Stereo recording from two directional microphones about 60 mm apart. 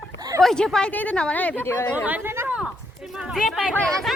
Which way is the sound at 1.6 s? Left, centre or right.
Left.